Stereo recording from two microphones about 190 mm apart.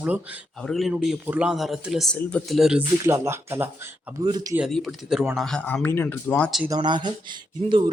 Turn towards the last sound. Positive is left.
turn(degrees=-25)  # may be behind; listen again after turning